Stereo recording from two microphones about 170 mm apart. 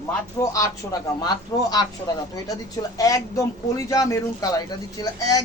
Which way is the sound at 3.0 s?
20° left (ahead or behind).